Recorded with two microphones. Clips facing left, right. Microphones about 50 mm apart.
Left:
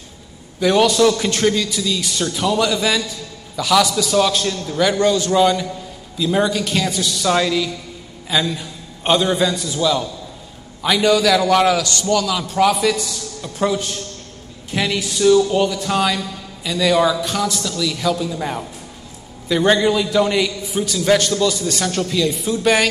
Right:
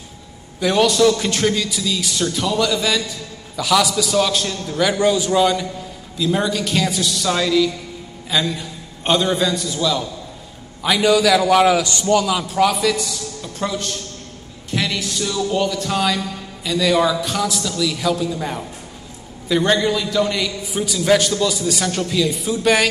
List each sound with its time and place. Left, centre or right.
0.6 s a man's voice: centre
3.5 s a man's voice: centre
11.8 s a man's voice: centre
12.5 s a man's voice: centre
19.7 s a man's voice: centre
20.6 s a man's voice: centre